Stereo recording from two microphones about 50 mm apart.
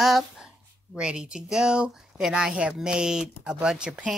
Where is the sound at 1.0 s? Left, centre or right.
Centre.